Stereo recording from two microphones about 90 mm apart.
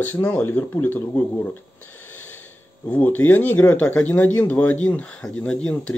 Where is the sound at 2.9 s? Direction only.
20° left (ahead or behind).